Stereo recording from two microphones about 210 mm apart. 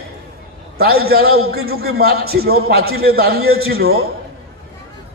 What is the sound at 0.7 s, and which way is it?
Speech, 45° right (ahead or behind).